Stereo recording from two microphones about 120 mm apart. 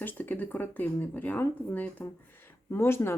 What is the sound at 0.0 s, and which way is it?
Speech, 15° left (ahead or behind).